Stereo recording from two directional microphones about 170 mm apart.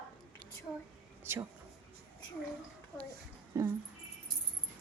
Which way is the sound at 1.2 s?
15° right (ahead or behind).